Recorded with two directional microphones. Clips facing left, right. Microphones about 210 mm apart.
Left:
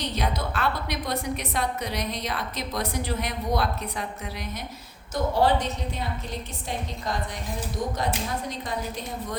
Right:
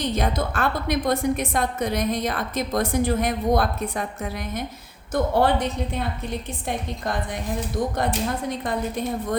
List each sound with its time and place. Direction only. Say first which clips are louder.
0.0 s a woman's voice: right 5 dB; 50° right (ahead or behind)